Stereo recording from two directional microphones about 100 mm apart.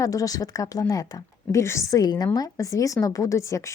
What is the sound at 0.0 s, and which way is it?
A woman's voice, 35° left (ahead or behind).